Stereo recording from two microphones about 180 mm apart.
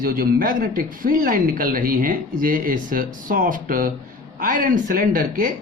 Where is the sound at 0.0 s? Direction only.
55° right (ahead or behind).